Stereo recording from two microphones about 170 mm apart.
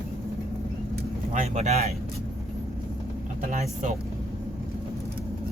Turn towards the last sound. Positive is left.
turn(degrees=-45)  # may be behind; listen again after turning